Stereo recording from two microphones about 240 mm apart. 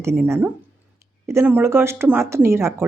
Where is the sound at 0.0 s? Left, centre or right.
Centre.